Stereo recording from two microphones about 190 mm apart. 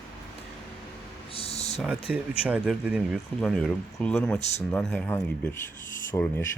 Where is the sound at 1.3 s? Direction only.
30° left (ahead or behind).